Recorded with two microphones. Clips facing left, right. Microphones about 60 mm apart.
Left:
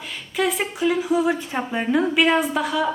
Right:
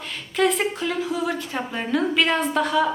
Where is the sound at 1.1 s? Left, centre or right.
Left; by 2.9 s centre.